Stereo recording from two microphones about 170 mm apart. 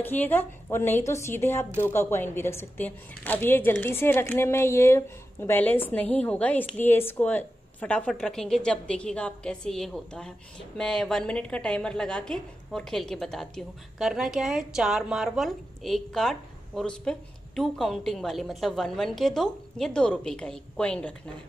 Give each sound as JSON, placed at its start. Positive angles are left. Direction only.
{"t": 0.0, "sound": "a woman's voice", "side_deg": 10}